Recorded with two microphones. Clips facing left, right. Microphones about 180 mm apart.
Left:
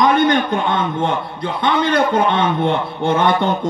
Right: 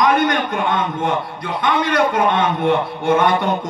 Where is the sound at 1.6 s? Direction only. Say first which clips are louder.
Left 1 dB; 30° left (ahead or behind).